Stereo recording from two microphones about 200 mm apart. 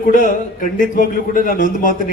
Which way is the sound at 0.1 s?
40° left (ahead or behind).